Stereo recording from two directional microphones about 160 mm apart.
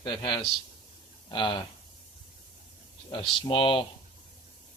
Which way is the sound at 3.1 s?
35° left (ahead or behind).